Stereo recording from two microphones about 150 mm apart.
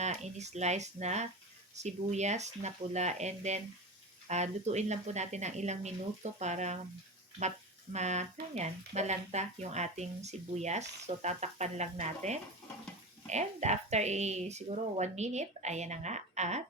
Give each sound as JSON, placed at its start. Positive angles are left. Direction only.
{"t": 0.0, "sound": "speech", "side_deg": -50}
{"t": 7.9, "sound": "speech", "side_deg": -50}